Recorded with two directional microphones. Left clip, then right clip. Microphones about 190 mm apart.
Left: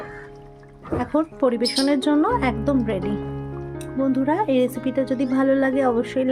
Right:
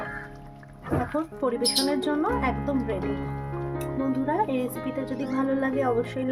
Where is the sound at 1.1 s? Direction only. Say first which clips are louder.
Left 7 dB; 50° left (ahead or behind).